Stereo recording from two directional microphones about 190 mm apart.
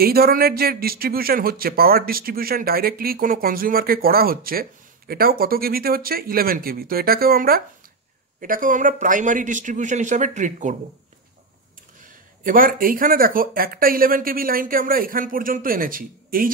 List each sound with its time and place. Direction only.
0.0 s a man's voice: 50° right (ahead or behind)
12.0 s speech: 45° right (ahead or behind)